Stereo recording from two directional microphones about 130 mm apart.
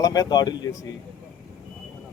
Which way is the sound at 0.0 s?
30° left (ahead or behind).